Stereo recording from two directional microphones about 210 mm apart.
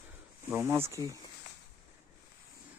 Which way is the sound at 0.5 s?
10° right (ahead or behind).